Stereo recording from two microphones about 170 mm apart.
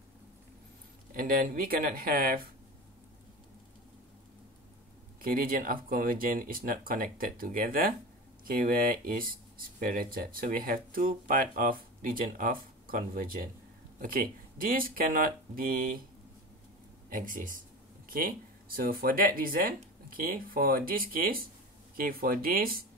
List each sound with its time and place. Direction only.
1.1 s speech: 55° right (ahead or behind)
5.2 s speech: 55° right (ahead or behind)
17.1 s a sound: 50° right (ahead or behind)
18.8 s speech: 55° right (ahead or behind)